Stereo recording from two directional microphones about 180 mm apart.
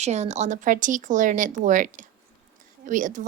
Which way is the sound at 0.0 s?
40° right (ahead or behind).